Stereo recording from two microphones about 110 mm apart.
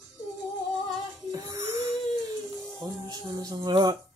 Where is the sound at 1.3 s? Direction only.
35° right (ahead or behind).